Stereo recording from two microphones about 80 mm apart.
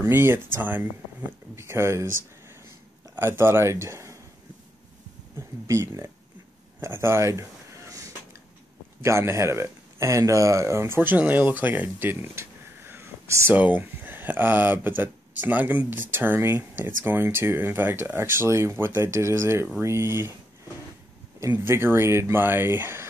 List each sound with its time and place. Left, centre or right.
0.1 s speech: right
1.5 s speech: right
5.7 s speech: right
6.8 s a sound: right
9.0 s speech: right
11.0 s speech: right
21.5 s speech: right